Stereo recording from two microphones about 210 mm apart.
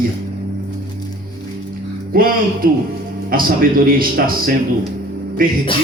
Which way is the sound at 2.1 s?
45° right (ahead or behind).